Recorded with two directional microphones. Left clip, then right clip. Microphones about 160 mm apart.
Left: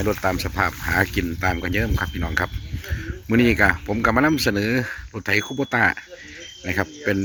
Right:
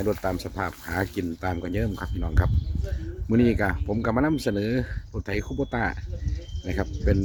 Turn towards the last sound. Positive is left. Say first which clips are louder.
# left 5 dB
turn(degrees=5)  # may be behind; listen again after turning